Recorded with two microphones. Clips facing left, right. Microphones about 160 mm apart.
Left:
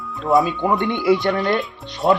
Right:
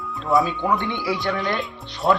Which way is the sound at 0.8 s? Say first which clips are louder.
Left 8 dB; 20° left (ahead or behind).